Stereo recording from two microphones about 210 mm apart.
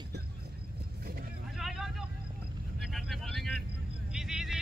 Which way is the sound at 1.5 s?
Centre (ahead or behind).